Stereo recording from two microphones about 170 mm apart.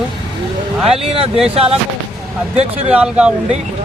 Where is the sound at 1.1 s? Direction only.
35° right (ahead or behind).